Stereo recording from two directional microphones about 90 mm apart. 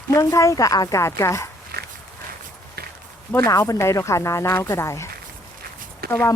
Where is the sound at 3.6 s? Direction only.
30° left (ahead or behind).